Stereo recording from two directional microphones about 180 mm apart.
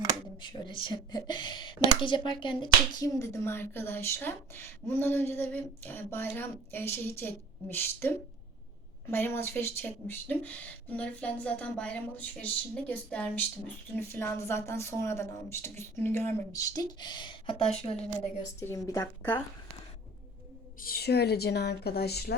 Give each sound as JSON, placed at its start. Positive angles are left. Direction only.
{"t": 0.4, "sound": "speech", "side_deg": 25}
{"t": 18.6, "sound": "speech", "side_deg": 15}
{"t": 20.8, "sound": "speech", "side_deg": 60}